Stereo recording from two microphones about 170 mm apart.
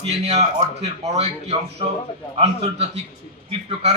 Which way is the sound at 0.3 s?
40° right (ahead or behind).